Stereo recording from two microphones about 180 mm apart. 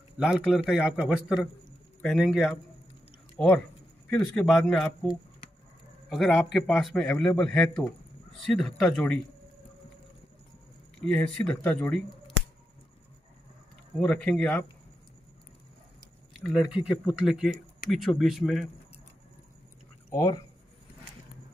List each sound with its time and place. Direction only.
0.2 s a man's voice: centre (ahead or behind)
11.0 s speech: 5° left (ahead or behind)
13.9 s speech: 5° left (ahead or behind)
16.3 s a man's voice: centre (ahead or behind)
20.1 s speech: 20° left (ahead or behind)